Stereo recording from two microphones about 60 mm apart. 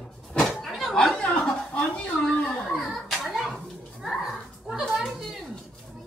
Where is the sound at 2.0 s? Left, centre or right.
Centre.